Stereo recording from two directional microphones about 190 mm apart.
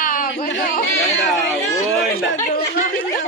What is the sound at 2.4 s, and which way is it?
Speech, 45° left (ahead or behind).